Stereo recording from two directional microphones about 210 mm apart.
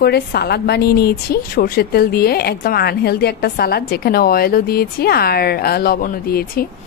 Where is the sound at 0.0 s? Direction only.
50° left (ahead or behind).